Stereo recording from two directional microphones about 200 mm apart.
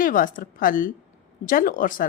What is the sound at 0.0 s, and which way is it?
A woman's voice, 45° left (ahead or behind).